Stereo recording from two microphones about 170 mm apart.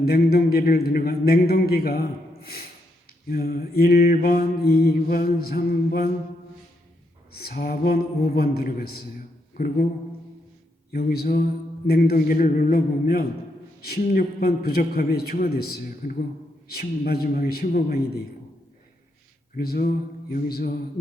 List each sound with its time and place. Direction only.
0.0 s mantra: 65° left (ahead or behind)
7.3 s mantra: 65° left (ahead or behind)
10.9 s mantra: 65° left (ahead or behind)
19.5 s mantra: 65° left (ahead or behind)